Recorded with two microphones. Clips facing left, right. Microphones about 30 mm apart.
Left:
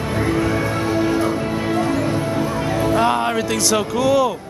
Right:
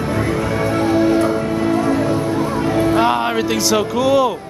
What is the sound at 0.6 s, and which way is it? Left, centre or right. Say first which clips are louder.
Music: right 4 dB; centre.